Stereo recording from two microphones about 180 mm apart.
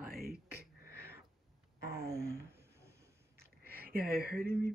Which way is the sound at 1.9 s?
15° right (ahead or behind).